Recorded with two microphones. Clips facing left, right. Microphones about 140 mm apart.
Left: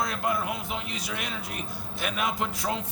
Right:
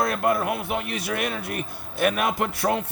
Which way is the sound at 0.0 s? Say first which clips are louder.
Right 6 dB; 55° right (ahead or behind).